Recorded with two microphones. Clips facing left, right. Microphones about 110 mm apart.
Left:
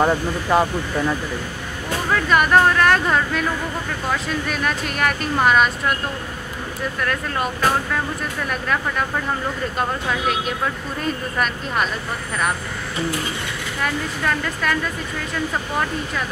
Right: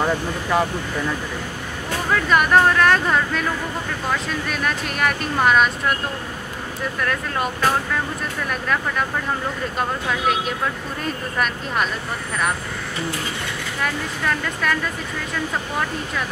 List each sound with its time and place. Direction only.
0.0 s speech: 25° left (ahead or behind)
2.0 s speech: centre (ahead or behind)
4.5 s speech: centre (ahead or behind)
7.0 s speech: centre (ahead or behind)
13.8 s speech: centre (ahead or behind)